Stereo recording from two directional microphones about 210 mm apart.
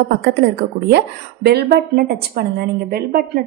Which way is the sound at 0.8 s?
50° right (ahead or behind).